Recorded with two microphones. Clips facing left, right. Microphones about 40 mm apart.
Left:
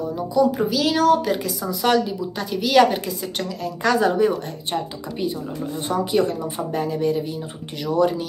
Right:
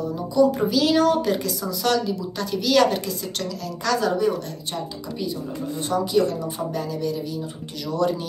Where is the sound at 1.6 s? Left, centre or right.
Centre.